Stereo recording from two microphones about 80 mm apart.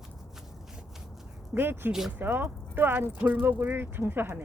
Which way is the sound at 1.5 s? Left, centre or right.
Right.